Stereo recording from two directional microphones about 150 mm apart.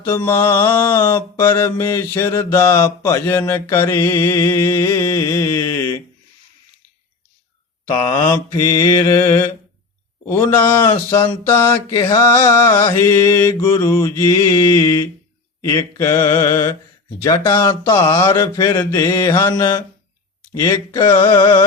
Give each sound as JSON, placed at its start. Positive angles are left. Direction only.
{"t": 0.0, "sound": "mantra", "side_deg": 15}
{"t": 8.0, "sound": "speech", "side_deg": 25}
{"t": 10.2, "sound": "mantra", "side_deg": 15}
{"t": 15.6, "sound": "speech", "side_deg": 20}
{"t": 21.2, "sound": "carnatic music", "side_deg": 30}